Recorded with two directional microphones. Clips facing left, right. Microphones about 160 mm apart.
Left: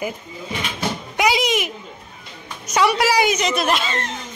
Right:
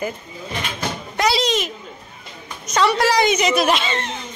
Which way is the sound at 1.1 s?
10° left (ahead or behind).